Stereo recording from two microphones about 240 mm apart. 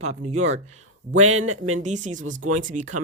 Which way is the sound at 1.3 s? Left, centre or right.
Right.